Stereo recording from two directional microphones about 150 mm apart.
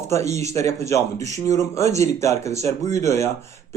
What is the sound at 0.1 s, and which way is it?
A man's voice, 20° left (ahead or behind).